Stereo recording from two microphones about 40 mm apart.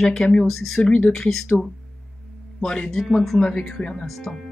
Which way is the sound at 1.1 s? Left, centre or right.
Centre.